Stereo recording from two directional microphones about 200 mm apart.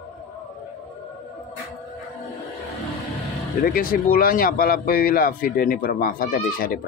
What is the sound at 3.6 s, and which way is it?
Speech, 45° left (ahead or behind).